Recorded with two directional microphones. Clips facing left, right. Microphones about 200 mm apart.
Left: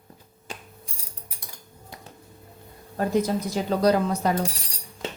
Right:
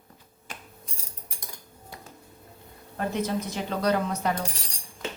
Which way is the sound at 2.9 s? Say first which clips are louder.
Left 5 dB; 35° left (ahead or behind).